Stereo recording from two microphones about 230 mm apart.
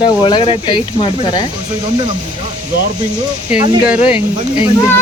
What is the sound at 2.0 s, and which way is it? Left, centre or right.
Speech, right.